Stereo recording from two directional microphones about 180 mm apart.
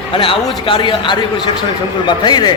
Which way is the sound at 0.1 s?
30° left (ahead or behind).